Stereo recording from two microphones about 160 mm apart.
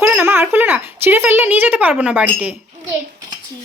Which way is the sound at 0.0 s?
10° right (ahead or behind).